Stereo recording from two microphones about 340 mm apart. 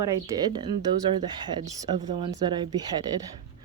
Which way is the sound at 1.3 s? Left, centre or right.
Centre.